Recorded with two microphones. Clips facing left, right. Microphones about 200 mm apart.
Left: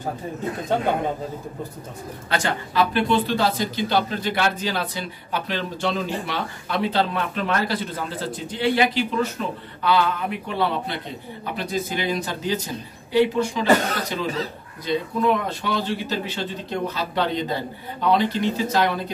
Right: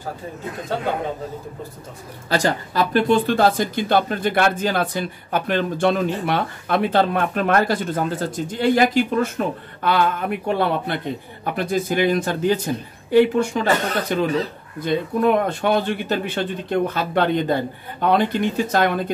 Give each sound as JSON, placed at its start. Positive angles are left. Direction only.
{"t": 2.2, "sound": "speech", "side_deg": -35}